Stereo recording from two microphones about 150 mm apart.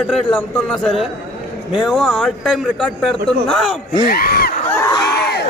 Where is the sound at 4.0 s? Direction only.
80° left.